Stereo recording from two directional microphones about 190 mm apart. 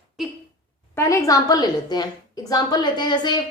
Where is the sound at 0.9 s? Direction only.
15° left (ahead or behind).